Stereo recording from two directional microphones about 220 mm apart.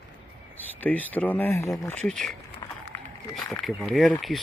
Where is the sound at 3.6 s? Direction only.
Centre (ahead or behind).